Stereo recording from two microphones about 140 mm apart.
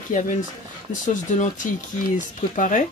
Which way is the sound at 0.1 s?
60° left (ahead or behind).